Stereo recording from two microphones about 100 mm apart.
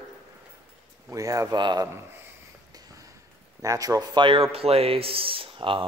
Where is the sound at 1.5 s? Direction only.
50° right (ahead or behind).